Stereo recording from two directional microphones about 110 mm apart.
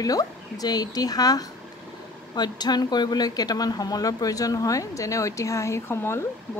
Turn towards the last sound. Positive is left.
turn(degrees=20)  # may be behind; listen again after turning